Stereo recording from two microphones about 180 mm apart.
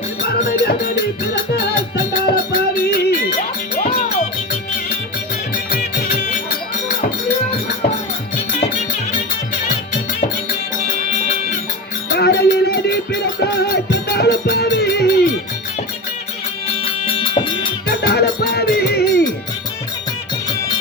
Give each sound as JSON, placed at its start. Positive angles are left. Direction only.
{"t": 1.5, "sound": "music", "side_deg": 60}
{"t": 5.7, "sound": "music", "side_deg": 55}
{"t": 12.1, "sound": "music", "side_deg": 65}
{"t": 17.1, "sound": "music", "side_deg": 25}
{"t": 17.8, "sound": "music", "side_deg": 65}